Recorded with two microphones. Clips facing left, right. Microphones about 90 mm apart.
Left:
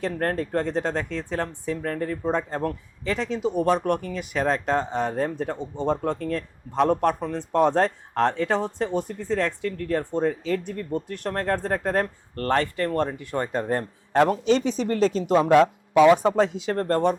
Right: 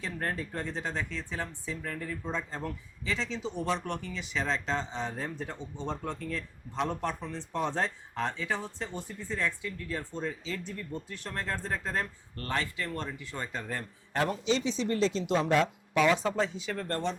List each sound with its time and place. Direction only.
0.0 s speech: 55° left (ahead or behind)